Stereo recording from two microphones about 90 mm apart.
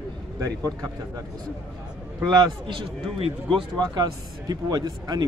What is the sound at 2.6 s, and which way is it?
Speech, 75° right (ahead or behind).